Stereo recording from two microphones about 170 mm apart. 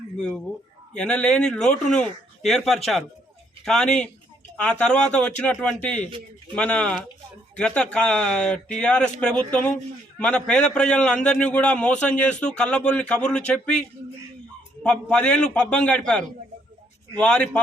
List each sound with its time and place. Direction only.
0.2 s a man's voice: 5° left (ahead or behind)
14.8 s a man's voice: 5° left (ahead or behind)